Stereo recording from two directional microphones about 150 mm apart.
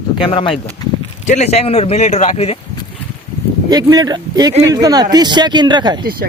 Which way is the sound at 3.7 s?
25° right (ahead or behind).